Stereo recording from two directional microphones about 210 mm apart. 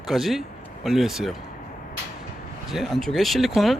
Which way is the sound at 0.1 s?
Centre (ahead or behind).